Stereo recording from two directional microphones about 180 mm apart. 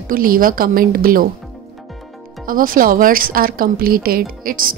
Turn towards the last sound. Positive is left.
turn(degrees=-50)  # may be behind; listen again after turning